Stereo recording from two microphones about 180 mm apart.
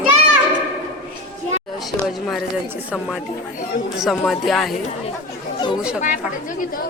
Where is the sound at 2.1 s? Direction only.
Centre (ahead or behind).